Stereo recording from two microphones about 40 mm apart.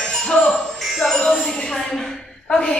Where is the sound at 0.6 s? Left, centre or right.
Centre.